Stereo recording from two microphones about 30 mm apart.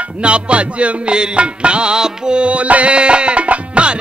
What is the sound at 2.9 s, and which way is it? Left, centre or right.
Music, right.